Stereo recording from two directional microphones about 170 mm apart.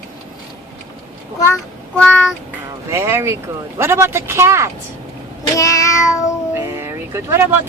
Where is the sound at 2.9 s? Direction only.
15° right (ahead or behind).